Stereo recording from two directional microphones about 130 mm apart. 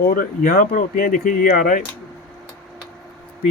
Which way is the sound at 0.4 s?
90° left.